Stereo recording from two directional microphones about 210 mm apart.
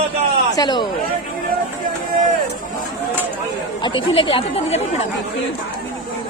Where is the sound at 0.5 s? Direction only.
20° left (ahead or behind).